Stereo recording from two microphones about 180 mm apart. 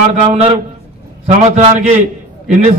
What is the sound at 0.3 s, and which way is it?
A man's voice, 35° right (ahead or behind).